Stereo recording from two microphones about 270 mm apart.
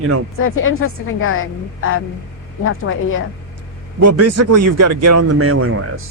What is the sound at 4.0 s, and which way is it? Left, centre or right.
Speech, right.